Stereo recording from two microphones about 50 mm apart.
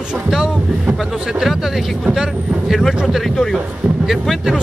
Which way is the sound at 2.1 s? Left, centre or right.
Centre.